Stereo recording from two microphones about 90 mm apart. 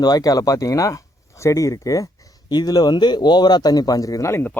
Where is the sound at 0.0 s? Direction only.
45° left (ahead or behind).